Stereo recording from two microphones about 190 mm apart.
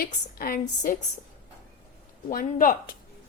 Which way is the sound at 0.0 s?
50° left (ahead or behind).